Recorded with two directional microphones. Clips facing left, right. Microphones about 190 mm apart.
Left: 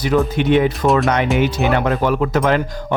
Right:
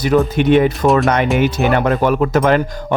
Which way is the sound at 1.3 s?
Centre (ahead or behind).